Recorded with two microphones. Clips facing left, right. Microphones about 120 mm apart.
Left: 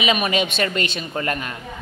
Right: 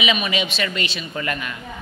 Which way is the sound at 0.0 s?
45° left (ahead or behind).